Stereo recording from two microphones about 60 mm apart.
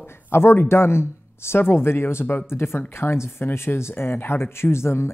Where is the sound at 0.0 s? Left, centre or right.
Left.